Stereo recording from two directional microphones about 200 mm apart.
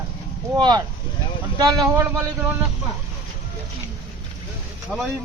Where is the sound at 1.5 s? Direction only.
20° right (ahead or behind).